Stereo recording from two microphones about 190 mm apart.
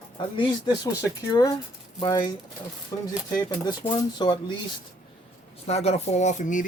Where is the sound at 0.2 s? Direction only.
25° left (ahead or behind).